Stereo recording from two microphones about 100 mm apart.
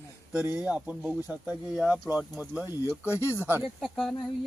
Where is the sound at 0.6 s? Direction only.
10° right (ahead or behind).